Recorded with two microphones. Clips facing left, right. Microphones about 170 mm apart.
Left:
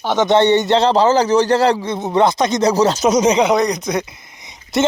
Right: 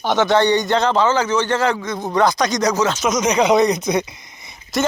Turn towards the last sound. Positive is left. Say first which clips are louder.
# left 4 dB
turn(degrees=20)  # may be behind; listen again after turning